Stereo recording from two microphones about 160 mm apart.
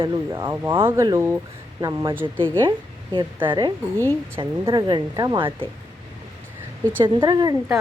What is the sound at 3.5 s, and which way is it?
A woman's voice, 25° right (ahead or behind).